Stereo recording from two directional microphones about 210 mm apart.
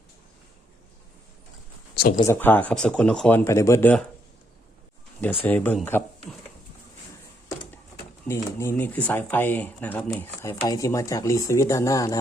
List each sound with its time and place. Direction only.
2.0 s speech: 45° left (ahead or behind)
2.2 s speech: 10° left (ahead or behind)
5.5 s speech: 10° left (ahead or behind)
8.3 s speech: 10° left (ahead or behind)